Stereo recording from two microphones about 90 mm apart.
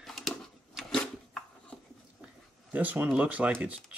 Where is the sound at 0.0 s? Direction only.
Centre (ahead or behind).